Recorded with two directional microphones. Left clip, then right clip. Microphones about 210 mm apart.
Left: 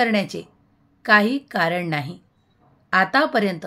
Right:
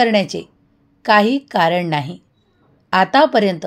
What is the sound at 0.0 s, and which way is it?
A woman's voice, 15° right (ahead or behind).